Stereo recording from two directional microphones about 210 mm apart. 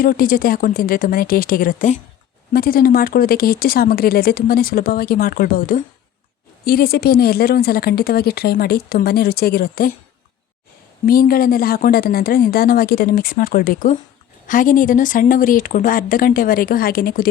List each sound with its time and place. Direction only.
0.0 s speech: 40° left (ahead or behind)
11.0 s speech: 45° left (ahead or behind)